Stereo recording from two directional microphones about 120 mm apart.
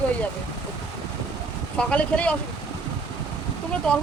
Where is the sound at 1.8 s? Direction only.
10° left (ahead or behind).